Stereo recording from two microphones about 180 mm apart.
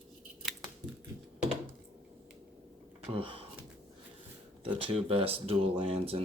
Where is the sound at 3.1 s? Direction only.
30° right (ahead or behind).